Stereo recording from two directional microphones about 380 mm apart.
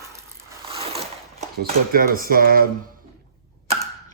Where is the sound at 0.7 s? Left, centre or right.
Centre.